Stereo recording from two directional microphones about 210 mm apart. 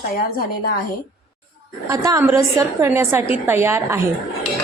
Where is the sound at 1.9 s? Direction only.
15° right (ahead or behind).